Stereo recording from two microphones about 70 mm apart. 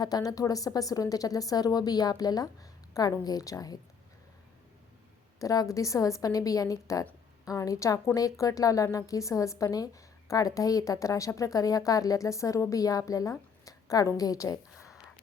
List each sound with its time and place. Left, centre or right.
0.0 s a woman's voice: left
5.4 s a woman's voice: left
13.7 s a sound: left
14.2 s speech: left